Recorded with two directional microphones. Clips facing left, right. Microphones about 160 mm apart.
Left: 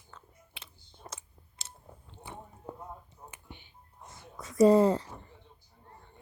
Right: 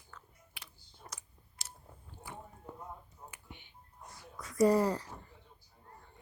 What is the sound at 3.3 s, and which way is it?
Music, 30° left (ahead or behind).